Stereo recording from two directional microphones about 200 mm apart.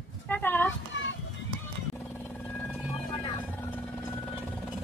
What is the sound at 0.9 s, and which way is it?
Children playing, 70° left (ahead or behind).